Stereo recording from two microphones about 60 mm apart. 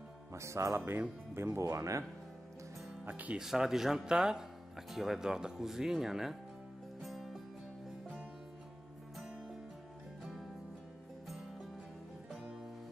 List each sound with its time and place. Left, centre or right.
0.3 s speech: right
0.7 s speech: right
3.1 s speech: right
3.3 s speech: centre
7.0 s music: centre
12.3 s music: centre